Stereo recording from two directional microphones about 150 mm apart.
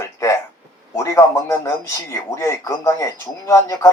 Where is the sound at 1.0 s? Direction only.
20° left (ahead or behind).